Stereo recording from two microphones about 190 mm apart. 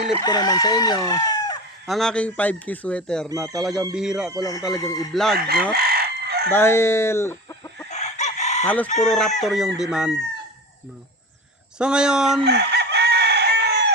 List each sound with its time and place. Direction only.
0.2 s speech: 20° left (ahead or behind)
1.9 s speech: centre (ahead or behind)
3.4 s chicken: 20° right (ahead or behind)
3.9 s speech: 5° right (ahead or behind)
4.4 s speech: 20° left (ahead or behind)
5.1 s speech: centre (ahead or behind)
5.7 s chicken: 55° right (ahead or behind)
6.5 s speech: 15° left (ahead or behind)
7.9 s chicken: 35° left (ahead or behind)
8.6 s speech: 10° left (ahead or behind)
11.8 s speech: 5° right (ahead or behind)
12.5 s chicken: 60° right (ahead or behind)